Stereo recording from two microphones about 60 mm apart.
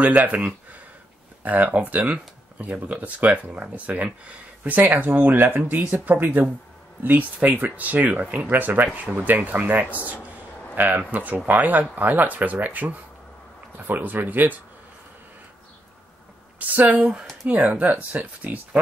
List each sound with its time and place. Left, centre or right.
0.0 s speech: right
16.5 s speech: right